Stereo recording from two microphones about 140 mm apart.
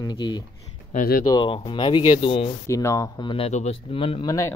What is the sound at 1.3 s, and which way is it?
Speech, 35° left (ahead or behind).